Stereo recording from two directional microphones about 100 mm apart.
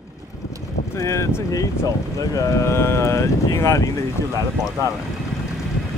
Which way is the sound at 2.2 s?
30° left (ahead or behind).